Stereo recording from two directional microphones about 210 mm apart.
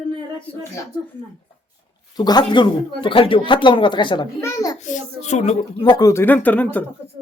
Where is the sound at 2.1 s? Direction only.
20° left (ahead or behind).